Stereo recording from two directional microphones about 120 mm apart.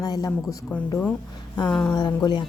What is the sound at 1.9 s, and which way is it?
Speech, 35° left (ahead or behind).